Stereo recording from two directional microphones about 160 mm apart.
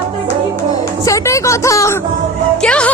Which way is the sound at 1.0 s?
20° left (ahead or behind).